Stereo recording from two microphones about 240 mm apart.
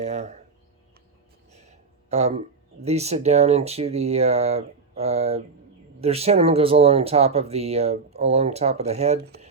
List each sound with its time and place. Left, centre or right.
0.0 s speech: right
1.5 s a sound: right
2.8 s speech: right